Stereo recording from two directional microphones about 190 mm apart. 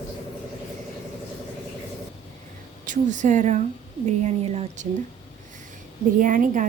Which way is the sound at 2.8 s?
40° right (ahead or behind).